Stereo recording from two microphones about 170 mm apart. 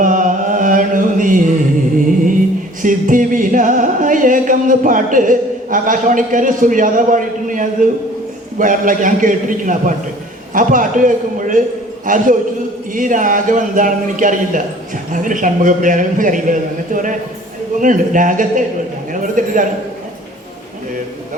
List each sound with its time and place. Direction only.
0.0 s mantra: 50° right (ahead or behind)
2.8 s music: 50° right (ahead or behind)
8.5 s a man's voice: 50° right (ahead or behind)